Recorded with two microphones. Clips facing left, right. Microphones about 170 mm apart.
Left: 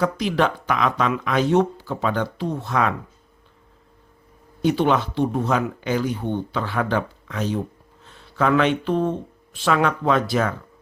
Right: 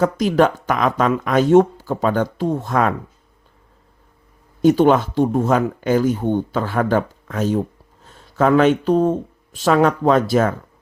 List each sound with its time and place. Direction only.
0.0 s speech: 45° right (ahead or behind)
4.6 s speech: 45° right (ahead or behind)